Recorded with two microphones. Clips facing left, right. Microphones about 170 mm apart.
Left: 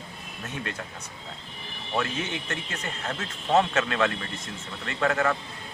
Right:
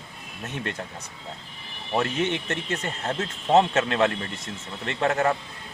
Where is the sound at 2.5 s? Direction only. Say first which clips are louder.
Right 5 dB; 30° right (ahead or behind).